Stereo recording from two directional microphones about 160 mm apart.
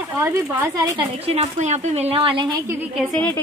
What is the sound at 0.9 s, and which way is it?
Speech, 40° right (ahead or behind).